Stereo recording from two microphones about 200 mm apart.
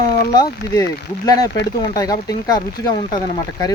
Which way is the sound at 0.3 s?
15° left (ahead or behind).